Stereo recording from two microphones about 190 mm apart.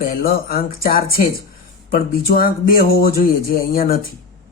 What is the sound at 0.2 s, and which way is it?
Speech, 50° left (ahead or behind).